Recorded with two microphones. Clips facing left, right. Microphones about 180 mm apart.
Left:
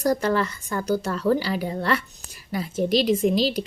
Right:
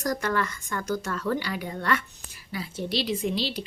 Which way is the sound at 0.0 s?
30° left (ahead or behind).